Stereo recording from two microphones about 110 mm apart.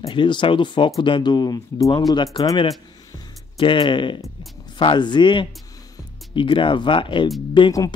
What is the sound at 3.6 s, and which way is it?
Speech, 50° left (ahead or behind).